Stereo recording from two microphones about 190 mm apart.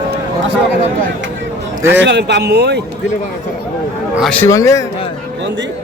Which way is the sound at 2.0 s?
65° right (ahead or behind).